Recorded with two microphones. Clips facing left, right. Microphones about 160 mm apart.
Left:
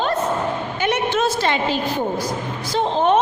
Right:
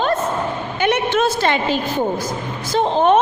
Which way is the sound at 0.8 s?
60° right (ahead or behind).